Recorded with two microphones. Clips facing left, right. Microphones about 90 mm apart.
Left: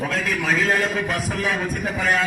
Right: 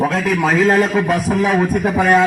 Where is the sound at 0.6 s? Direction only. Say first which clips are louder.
Right 8 dB; 30° right (ahead or behind).